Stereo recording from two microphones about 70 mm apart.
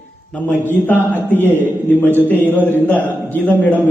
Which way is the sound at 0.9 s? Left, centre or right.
Left.